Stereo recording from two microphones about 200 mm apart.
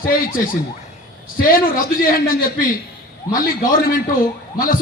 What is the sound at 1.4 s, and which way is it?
A man's voice, 45° left (ahead or behind).